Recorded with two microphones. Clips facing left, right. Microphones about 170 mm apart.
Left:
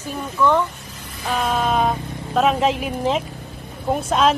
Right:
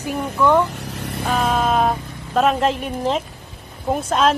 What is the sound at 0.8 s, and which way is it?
Vehicle, 75° right (ahead or behind).